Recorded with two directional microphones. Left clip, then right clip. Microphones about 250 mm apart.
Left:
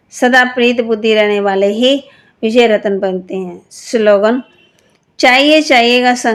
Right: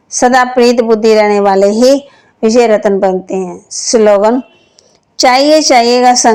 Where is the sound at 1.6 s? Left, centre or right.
Centre.